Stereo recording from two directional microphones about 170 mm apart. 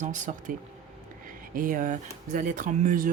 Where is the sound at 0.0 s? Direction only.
50° right (ahead or behind).